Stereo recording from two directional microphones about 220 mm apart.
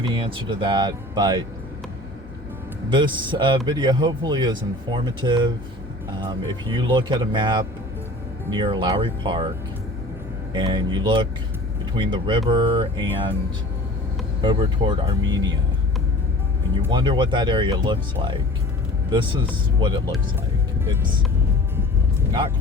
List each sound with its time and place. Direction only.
0.0 s speech: 20° right (ahead or behind)
2.9 s speech: 20° right (ahead or behind)
10.5 s speech: 20° right (ahead or behind)
14.4 s speech: 20° right (ahead or behind)
16.8 s speech: 20° right (ahead or behind)
19.8 s speech: 20° right (ahead or behind)